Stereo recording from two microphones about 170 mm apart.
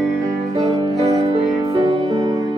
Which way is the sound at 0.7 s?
30° right (ahead or behind).